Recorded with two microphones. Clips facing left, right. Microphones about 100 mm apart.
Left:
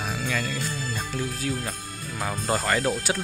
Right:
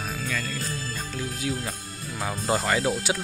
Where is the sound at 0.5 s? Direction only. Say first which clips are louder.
Left 2 dB; 35° right (ahead or behind).